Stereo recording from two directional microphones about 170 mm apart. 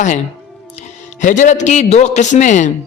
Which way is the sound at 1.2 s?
50° left (ahead or behind).